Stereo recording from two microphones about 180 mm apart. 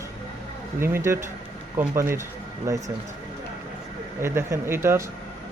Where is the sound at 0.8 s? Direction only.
15° right (ahead or behind).